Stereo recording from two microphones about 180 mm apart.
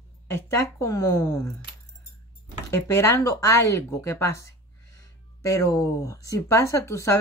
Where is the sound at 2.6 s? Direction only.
15° left (ahead or behind).